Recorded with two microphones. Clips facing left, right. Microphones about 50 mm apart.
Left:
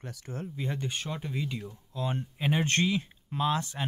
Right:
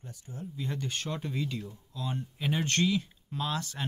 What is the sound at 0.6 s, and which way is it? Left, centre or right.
Speech, left.